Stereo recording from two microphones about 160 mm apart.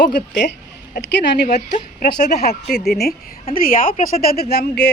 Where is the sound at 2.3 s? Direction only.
80° left.